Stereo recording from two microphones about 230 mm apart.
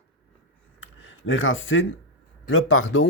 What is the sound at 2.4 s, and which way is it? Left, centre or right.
Speech, left.